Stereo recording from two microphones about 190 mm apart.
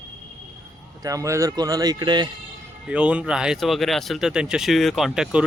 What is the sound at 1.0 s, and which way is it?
A man's voice, 15° right (ahead or behind).